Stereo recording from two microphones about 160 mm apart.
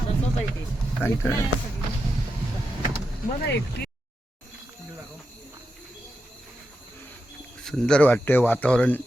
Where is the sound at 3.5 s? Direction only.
90° left.